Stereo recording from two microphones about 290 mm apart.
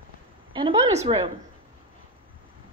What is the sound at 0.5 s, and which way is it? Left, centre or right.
Speech, centre.